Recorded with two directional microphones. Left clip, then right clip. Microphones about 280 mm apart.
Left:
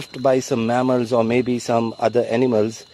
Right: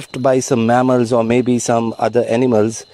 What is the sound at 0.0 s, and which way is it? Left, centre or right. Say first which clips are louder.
Speech: right 3 dB; right.